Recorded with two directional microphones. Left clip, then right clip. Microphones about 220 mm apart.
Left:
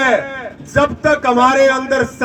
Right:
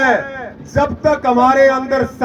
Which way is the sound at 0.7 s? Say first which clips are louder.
Left 1 dB; 35° left (ahead or behind).